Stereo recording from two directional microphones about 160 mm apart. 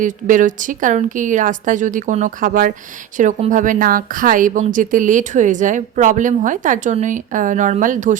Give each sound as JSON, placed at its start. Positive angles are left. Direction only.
{"t": 0.0, "sound": "a woman's voice", "side_deg": -55}